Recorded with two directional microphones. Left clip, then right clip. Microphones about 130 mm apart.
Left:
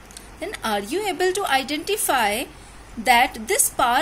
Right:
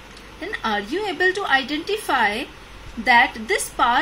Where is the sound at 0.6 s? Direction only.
35° left (ahead or behind).